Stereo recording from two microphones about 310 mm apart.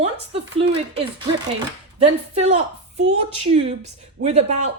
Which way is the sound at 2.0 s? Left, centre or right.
Right.